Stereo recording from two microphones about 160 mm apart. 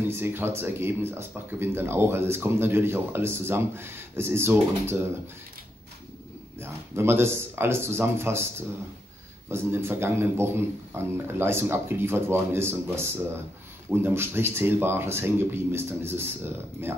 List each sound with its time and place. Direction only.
0.1 s speech: 15° right (ahead or behind)
6.6 s speech: 15° right (ahead or behind)